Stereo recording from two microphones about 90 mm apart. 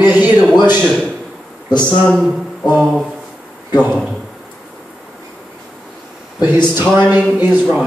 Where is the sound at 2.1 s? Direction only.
Centre (ahead or behind).